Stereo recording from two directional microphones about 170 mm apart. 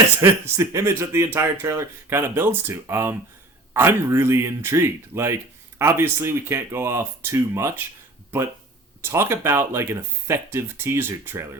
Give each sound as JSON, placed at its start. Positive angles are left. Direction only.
{"t": 0.2, "sound": "speech", "side_deg": -15}
{"t": 9.0, "sound": "speech", "side_deg": -15}